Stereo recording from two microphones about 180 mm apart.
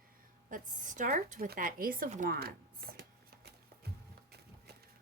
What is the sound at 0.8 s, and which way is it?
Speech, 45° right (ahead or behind).